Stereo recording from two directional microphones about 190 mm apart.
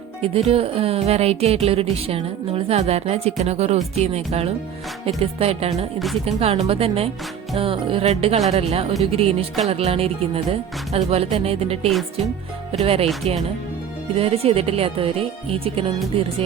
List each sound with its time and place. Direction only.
0.2 s music: 30° right (ahead or behind)
5.7 s music: centre (ahead or behind)
6.2 s music: 30° right (ahead or behind)
14.2 s music: 30° right (ahead or behind)